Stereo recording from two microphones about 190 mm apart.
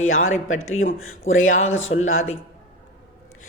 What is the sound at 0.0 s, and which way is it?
Speech, 90° left.